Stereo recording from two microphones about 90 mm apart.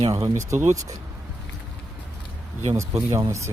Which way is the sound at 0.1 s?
35° right (ahead or behind).